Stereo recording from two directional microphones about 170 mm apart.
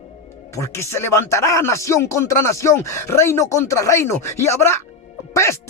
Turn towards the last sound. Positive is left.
turn(degrees=15)  # may be behind; listen again after turning